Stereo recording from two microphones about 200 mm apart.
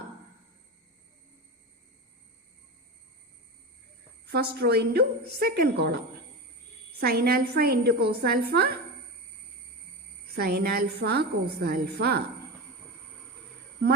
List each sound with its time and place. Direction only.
4.3 s a woman's voice: 50° right (ahead or behind)
7.0 s a woman's voice: 50° right (ahead or behind)
10.3 s a woman's voice: 55° right (ahead or behind)